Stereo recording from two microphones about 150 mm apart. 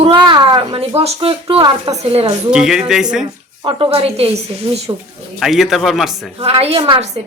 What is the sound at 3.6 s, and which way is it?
A woman's voice, 40° right (ahead or behind).